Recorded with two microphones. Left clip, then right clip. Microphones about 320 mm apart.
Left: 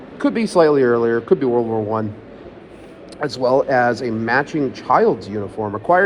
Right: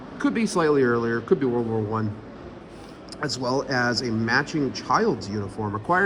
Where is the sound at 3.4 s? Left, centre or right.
Centre.